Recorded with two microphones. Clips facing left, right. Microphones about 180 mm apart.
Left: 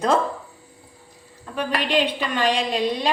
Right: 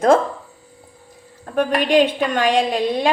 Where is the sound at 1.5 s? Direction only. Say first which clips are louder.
Right 7 dB; 50° right (ahead or behind).